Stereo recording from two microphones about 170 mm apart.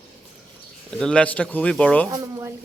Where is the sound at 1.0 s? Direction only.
5° left (ahead or behind).